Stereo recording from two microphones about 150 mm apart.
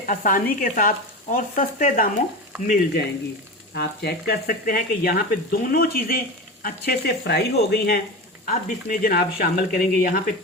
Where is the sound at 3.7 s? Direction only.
90° left.